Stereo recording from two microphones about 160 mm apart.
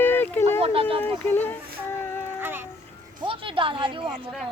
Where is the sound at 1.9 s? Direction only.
15° left (ahead or behind).